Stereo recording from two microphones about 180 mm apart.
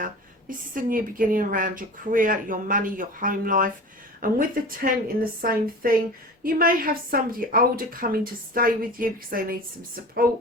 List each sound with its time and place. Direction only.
0.0 s speech: 50° right (ahead or behind)